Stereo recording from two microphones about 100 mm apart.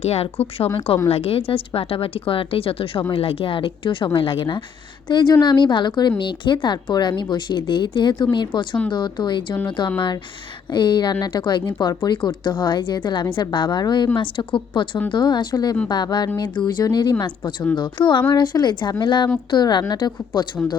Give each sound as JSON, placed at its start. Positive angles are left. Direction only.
{"t": 0.0, "sound": "a woman's voice", "side_deg": 85}
{"t": 14.2, "sound": "speech", "side_deg": 60}
{"t": 15.1, "sound": "a woman's voice", "side_deg": 50}